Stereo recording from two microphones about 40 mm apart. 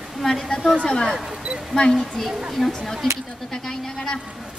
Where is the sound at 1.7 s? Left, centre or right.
Centre.